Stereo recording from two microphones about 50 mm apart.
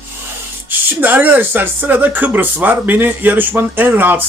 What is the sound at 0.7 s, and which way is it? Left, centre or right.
Speech, right.